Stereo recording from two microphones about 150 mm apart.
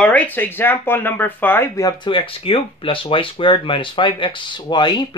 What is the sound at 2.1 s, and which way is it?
Speech, 35° left (ahead or behind).